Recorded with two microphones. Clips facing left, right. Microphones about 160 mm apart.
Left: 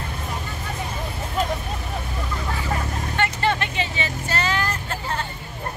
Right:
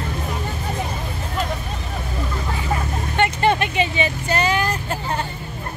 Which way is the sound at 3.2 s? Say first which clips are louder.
Right 5 dB; 20° right (ahead or behind).